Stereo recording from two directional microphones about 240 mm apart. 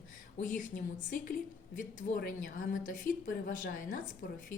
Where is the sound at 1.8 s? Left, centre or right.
Left.